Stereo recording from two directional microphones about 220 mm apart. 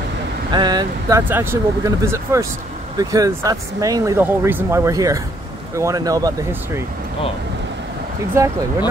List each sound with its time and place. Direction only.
0.5 s speech: 20° right (ahead or behind)
8.4 s speech: 15° right (ahead or behind)